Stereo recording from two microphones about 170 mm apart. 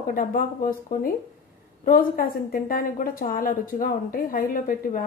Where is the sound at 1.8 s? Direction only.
55° left (ahead or behind).